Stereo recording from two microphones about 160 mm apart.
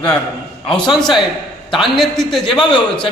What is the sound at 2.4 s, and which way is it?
Speech, 30° left (ahead or behind).